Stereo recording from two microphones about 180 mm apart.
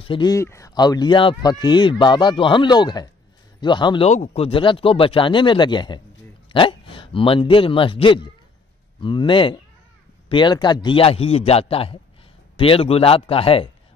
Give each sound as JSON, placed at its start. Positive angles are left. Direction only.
{"t": 0.0, "sound": "speech", "side_deg": 25}
{"t": 4.1, "sound": "a man's voice", "side_deg": 40}